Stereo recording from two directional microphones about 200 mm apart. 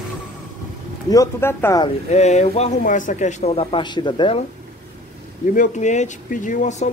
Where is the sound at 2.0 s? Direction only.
35° left (ahead or behind).